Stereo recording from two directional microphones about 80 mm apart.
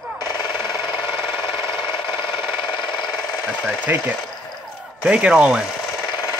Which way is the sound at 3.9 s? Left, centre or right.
Right.